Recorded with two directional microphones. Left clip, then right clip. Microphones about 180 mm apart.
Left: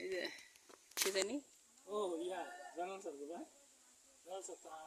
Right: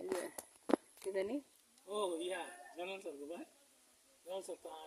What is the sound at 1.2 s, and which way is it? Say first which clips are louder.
Speech: right 5 dB; 15° right (ahead or behind).